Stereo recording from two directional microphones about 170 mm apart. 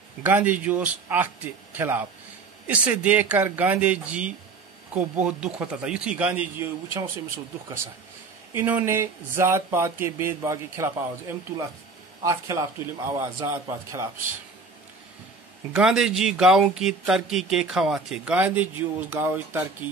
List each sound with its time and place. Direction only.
0.2 s speech: 10° right (ahead or behind)
8.5 s speech: 10° right (ahead or behind)
15.7 s speech: 5° right (ahead or behind)